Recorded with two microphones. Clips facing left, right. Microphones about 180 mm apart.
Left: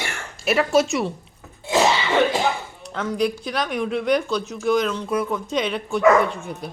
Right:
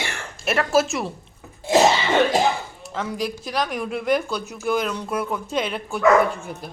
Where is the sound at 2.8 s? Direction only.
5° right (ahead or behind).